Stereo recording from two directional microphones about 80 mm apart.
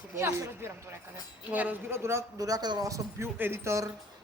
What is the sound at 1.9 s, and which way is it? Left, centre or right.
Speech, right.